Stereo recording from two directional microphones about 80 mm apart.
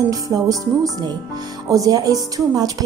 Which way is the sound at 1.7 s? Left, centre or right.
Right.